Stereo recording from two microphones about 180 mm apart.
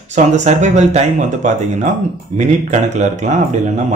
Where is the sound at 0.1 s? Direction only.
40° right (ahead or behind).